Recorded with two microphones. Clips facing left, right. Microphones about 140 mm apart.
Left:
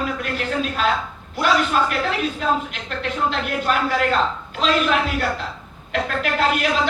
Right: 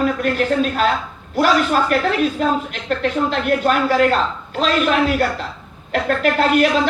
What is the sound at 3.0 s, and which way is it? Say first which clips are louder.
A woman's voice: right 2 dB; 45° right (ahead or behind).